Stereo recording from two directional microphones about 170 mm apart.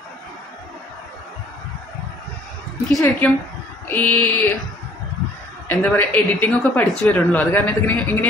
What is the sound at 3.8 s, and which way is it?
Mantra, 10° left (ahead or behind).